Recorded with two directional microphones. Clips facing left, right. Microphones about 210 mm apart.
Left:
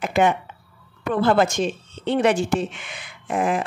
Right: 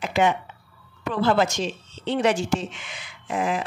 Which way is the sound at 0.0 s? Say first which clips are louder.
Left 2 dB; 55° left (ahead or behind).